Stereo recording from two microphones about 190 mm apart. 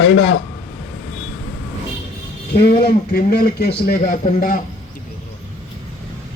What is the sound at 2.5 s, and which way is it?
A man's voice, 55° left (ahead or behind).